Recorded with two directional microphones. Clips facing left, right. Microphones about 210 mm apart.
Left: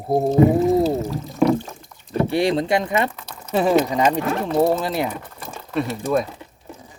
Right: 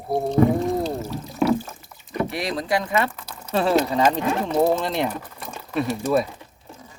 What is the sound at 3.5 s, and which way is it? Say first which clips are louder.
Speech: left 2 dB; 10° left (ahead or behind).